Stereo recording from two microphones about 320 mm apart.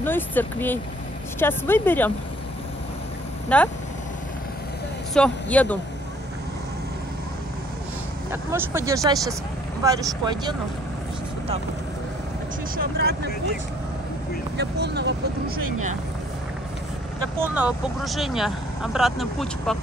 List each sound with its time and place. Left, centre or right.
0.0 s speech: centre
3.4 s speech: centre
5.1 s speech: centre
8.3 s speech: centre
12.7 s speech: right
14.6 s speech: right
17.4 s speech: centre